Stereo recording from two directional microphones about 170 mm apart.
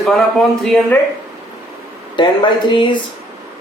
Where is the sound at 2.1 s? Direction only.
25° left (ahead or behind).